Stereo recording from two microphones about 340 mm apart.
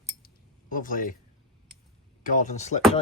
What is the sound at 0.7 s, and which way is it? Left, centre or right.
Speech, left.